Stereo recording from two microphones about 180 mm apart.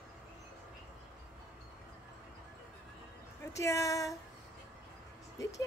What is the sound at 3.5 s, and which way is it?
Speech, 15° left (ahead or behind).